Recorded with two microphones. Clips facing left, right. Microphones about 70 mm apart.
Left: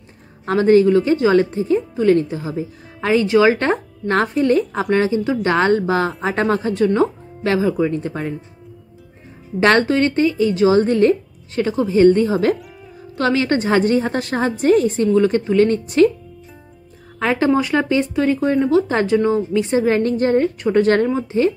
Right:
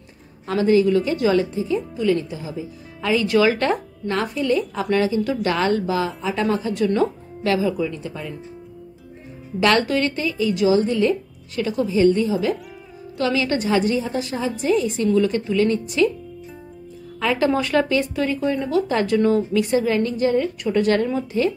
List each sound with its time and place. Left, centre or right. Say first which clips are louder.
0.5 s a woman's voice: left 4 dB; left
1.4 s a woman's voice: left 5 dB; left
9.6 s a woman's voice: left 4 dB; left
13.2 s a woman's voice: left 4 dB; left
17.2 s speech: left 2 dB; left
17.5 s speech: left 3 dB; centre
19.1 s speech: left 1 dB; centre
19.6 s a woman's voice: left 3 dB; left